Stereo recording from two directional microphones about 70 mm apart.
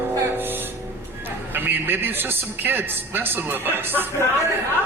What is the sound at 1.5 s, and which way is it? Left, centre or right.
A woman's voice, right.